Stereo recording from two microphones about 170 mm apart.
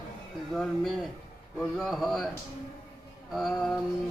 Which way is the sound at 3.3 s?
Centre (ahead or behind).